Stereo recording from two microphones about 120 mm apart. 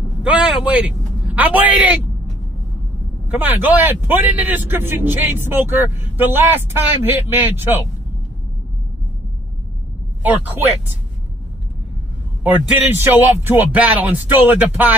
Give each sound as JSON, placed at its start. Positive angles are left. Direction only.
{"t": 0.2, "sound": "speech", "side_deg": -5}
{"t": 3.3, "sound": "speech", "side_deg": -15}
{"t": 12.4, "sound": "speech", "side_deg": -15}